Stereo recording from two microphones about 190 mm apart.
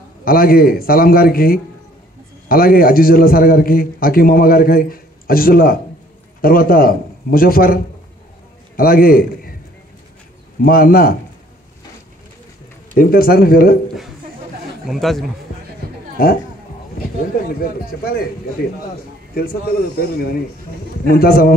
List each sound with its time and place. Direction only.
0.2 s a man's voice: 50° left (ahead or behind)
10.6 s a man's voice: 50° left (ahead or behind)
12.9 s a man's voice: 50° left (ahead or behind)
14.9 s a man's voice: centre (ahead or behind)
17.6 s a man's voice: 50° left (ahead or behind)
19.4 s a man's voice: 50° left (ahead or behind)